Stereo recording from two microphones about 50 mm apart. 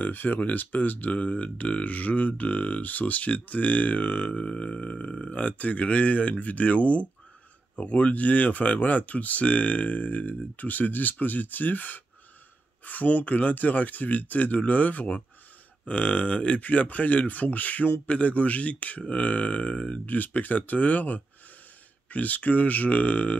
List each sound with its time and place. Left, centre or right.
0.0 s speech: left